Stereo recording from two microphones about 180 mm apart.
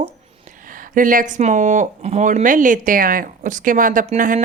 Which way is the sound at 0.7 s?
50° right (ahead or behind).